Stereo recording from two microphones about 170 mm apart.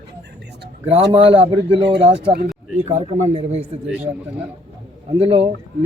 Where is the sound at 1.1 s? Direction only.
35° right (ahead or behind).